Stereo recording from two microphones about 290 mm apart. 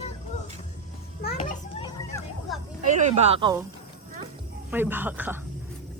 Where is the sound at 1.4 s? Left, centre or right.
Centre.